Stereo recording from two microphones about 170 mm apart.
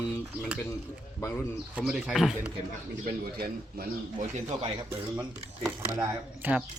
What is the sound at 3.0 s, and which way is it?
Speech, 60° right (ahead or behind).